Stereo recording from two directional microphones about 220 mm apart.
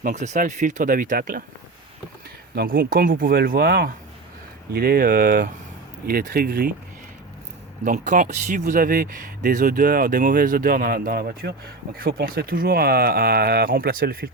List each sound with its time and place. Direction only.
0.0 s speech: 35° right (ahead or behind)
2.6 s speech: 40° right (ahead or behind)
7.9 s speech: 35° right (ahead or behind)